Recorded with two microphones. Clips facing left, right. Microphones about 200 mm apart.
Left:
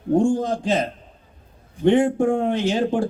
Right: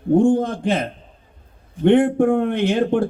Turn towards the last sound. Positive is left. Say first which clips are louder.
# right 3 dB
turn(degrees=-60)  # may be behind; listen again after turning